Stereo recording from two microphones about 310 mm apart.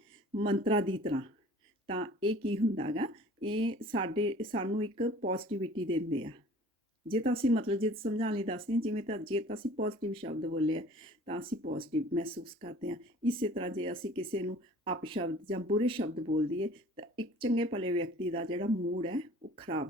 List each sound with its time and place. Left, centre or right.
0.3 s speech: centre